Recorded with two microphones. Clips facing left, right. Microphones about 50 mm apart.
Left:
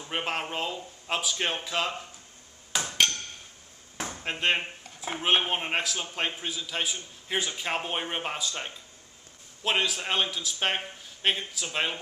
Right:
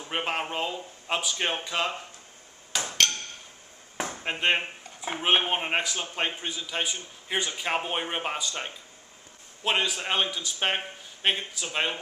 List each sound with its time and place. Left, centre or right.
0.0 s speech: centre
3.9 s chop: right
4.2 s speech: centre